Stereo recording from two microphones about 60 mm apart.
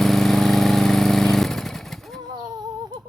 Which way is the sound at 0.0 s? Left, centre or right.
Centre.